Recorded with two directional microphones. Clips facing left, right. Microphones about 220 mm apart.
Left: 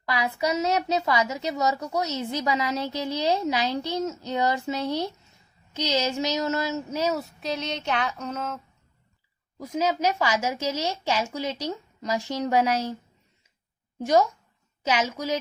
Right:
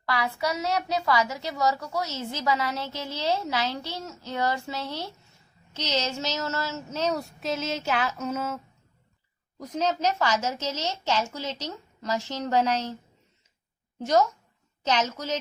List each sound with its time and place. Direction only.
0.0 s a woman's voice: 20° left (ahead or behind); by 8.6 s 5° right (ahead or behind)
9.6 s a woman's voice: 10° left (ahead or behind)
14.0 s a woman's voice: 15° left (ahead or behind)